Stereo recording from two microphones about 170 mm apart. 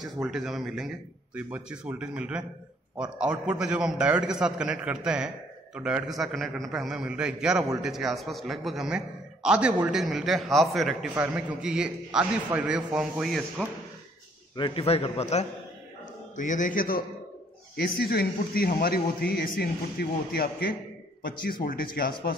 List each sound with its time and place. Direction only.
0.0 s a man's voice: 5° right (ahead or behind)
14.6 s a man's voice: 35° left (ahead or behind); by 22.3 s 60° left (ahead or behind)